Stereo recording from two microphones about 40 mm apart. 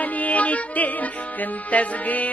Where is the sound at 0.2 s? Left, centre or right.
Left.